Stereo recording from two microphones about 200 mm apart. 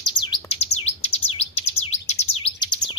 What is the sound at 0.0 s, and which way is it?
Bird, 20° left (ahead or behind).